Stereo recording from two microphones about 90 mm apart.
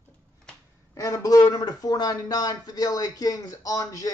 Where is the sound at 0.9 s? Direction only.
40° left (ahead or behind).